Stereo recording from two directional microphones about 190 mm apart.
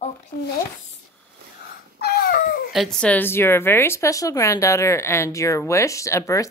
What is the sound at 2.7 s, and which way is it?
Speech, centre (ahead or behind).